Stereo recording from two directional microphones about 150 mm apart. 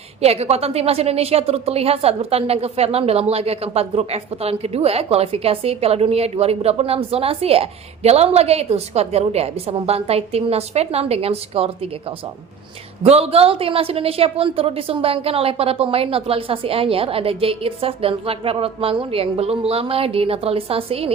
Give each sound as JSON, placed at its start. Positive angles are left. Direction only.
{"t": 0.2, "sound": "a woman's voice", "side_deg": -45}